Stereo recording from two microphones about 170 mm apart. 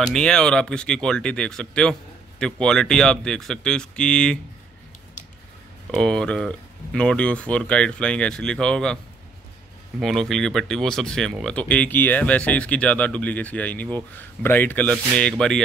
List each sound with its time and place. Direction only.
0.0 s speech: 5° left (ahead or behind)
5.9 s speech: 5° left (ahead or behind)
9.9 s speech: centre (ahead or behind)